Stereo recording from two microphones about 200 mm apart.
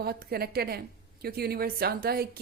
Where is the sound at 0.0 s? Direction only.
50° right (ahead or behind).